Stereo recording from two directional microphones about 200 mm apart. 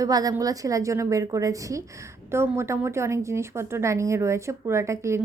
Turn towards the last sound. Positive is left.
turn(degrees=-15)  # may be behind; listen again after turning